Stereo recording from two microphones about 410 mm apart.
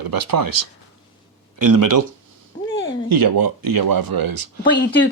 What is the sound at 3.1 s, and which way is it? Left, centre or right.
Speech, right.